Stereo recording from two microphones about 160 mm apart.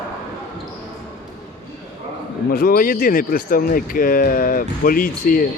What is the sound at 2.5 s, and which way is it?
Speech, 65° left (ahead or behind).